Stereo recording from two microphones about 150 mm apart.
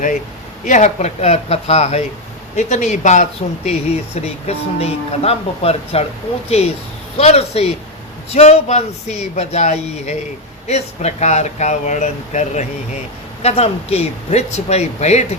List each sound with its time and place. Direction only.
0.6 s speech: 50° left (ahead or behind)